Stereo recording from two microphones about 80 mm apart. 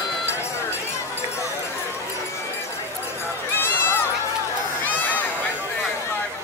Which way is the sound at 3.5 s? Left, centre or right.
Left.